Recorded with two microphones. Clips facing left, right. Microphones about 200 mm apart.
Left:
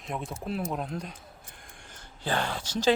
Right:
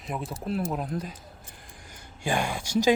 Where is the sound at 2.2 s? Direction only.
10° right (ahead or behind).